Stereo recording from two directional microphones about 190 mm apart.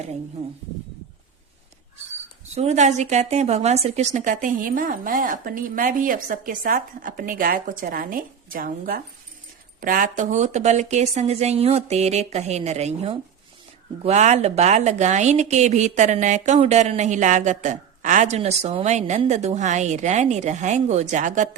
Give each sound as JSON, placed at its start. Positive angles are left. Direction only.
{"t": 2.6, "sound": "a woman's voice", "side_deg": -35}